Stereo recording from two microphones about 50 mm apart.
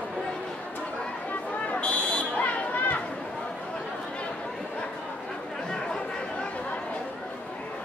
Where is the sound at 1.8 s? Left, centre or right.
Left.